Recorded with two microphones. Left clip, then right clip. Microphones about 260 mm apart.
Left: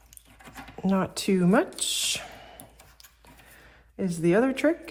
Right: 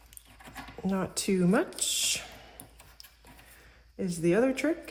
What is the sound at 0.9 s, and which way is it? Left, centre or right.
A woman's voice, centre.